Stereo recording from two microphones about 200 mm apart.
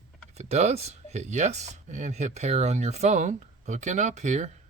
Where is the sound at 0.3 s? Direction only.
30° right (ahead or behind).